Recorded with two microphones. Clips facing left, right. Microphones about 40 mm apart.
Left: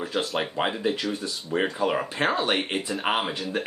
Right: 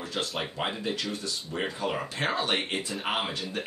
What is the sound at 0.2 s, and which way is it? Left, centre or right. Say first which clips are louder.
Speech: left 3 dB; centre.